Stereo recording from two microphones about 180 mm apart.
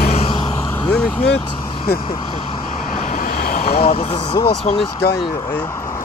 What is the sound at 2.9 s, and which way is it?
Vehicle, 50° left (ahead or behind).